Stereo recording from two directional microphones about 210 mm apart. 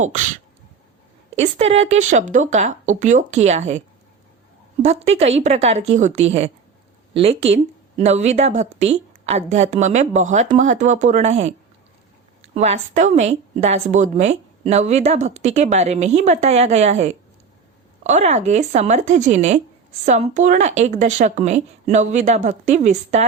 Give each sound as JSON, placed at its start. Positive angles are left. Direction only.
{"t": 0.0, "sound": "a woman's voice", "side_deg": -35}
{"t": 1.4, "sound": "a woman's voice", "side_deg": -30}
{"t": 12.5, "sound": "a woman's voice", "side_deg": -30}